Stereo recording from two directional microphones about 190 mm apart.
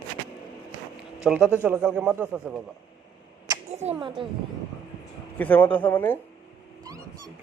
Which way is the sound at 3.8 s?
35° right (ahead or behind).